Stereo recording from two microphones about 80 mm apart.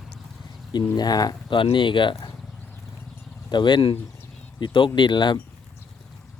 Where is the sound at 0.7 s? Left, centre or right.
Left.